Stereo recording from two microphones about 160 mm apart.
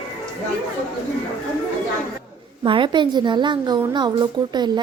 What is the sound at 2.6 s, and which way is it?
A woman's voice, 30° right (ahead or behind).